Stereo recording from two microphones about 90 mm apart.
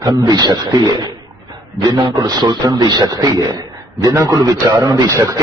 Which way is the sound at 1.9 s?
55° right (ahead or behind).